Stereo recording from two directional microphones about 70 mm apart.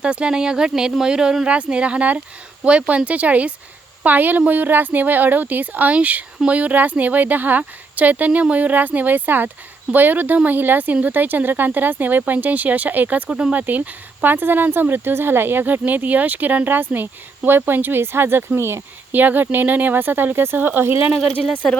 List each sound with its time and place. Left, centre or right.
0.0 s speech: centre; by 21.0 s right
21.2 s speech: centre